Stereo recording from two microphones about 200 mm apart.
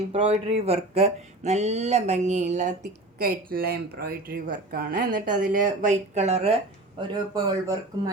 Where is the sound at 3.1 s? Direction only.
50° right (ahead or behind); by 6.6 s 30° right (ahead or behind).